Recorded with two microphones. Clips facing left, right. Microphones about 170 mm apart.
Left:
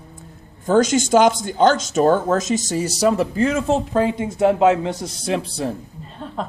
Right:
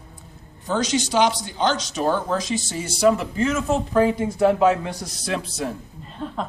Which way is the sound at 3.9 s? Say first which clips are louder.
Even; 20° left (ahead or behind).